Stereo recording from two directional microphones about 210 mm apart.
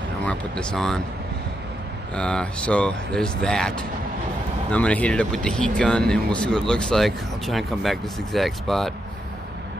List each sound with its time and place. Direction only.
0.2 s speech: 5° left (ahead or behind)
2.1 s speech: 5° left (ahead or behind)